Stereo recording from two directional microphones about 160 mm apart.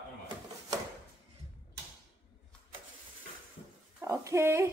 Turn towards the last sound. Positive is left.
turn(degrees=-15)  # may be behind; listen again after turning